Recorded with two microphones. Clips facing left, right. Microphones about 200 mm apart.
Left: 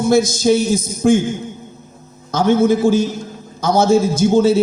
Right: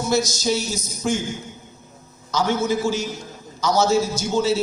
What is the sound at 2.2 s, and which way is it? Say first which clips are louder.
A man's voice: left 8 dB; 55° left (ahead or behind).